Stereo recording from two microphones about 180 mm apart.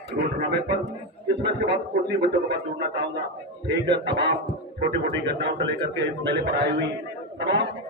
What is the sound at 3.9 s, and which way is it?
A man's voice, 70° right (ahead or behind).